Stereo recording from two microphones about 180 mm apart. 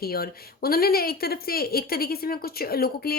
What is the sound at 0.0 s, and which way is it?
Speech, 55° left (ahead or behind).